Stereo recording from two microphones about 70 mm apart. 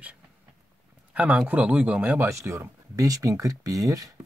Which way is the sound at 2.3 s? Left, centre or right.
Right.